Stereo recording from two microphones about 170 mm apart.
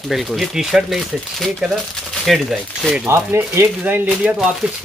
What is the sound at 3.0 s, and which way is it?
Speech, 15° right (ahead or behind).